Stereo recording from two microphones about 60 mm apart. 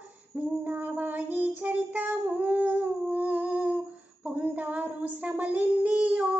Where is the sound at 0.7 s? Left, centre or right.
Right.